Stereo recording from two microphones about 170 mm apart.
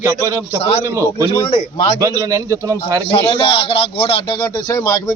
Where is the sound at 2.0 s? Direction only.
15° right (ahead or behind).